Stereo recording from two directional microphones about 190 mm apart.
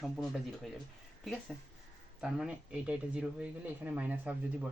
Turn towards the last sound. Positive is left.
turn(degrees=-5)  # may be behind; listen again after turning